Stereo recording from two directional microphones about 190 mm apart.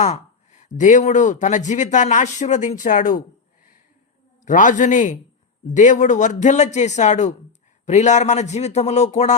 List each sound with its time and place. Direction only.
0.0 s speech: 40° left (ahead or behind)
4.4 s a man's voice: 45° left (ahead or behind)